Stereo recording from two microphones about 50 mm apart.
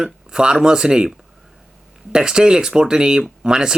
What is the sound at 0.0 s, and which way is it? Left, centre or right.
Speech, centre.